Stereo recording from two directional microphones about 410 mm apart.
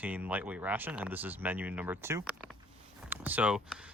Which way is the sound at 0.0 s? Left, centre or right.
Centre.